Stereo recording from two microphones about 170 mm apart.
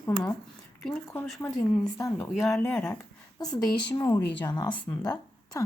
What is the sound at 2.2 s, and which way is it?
Speech, centre (ahead or behind).